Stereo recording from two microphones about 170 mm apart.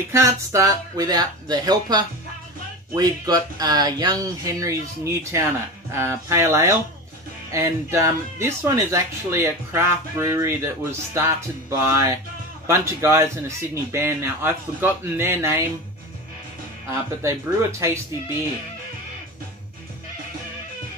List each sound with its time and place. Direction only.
0.1 s speech: 15° right (ahead or behind)
17.2 s speech: 15° right (ahead or behind)